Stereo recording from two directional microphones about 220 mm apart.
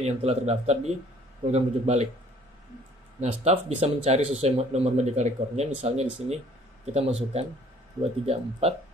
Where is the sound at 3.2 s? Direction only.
30° right (ahead or behind).